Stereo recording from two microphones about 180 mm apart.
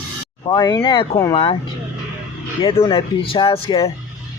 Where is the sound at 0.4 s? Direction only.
20° left (ahead or behind).